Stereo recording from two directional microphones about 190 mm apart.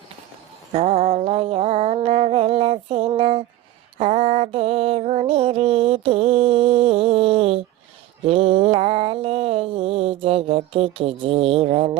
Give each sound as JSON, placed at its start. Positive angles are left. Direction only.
{"t": 0.7, "sound": "music", "side_deg": -35}
{"t": 8.3, "sound": "mantra", "side_deg": -30}